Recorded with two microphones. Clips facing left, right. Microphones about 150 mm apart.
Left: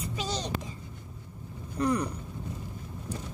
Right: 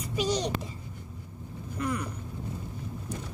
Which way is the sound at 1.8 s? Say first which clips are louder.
Left 5 dB; 35° left (ahead or behind).